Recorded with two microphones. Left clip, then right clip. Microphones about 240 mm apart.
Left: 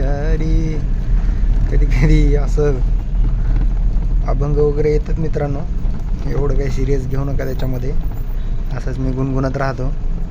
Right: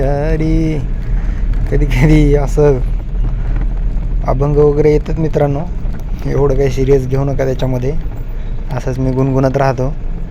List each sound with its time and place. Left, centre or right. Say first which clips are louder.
0.0 s mantra: right 8 dB; centre
1.7 s speech: right 7 dB; centre
4.3 s speech: right 6 dB; centre